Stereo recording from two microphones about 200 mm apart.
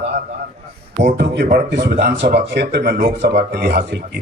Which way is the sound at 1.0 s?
60° right (ahead or behind).